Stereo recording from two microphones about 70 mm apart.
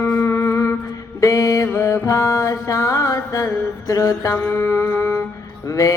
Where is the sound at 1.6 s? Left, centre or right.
Left.